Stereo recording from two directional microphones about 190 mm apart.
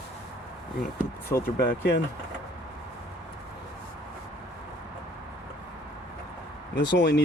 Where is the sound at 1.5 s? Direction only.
55° left (ahead or behind).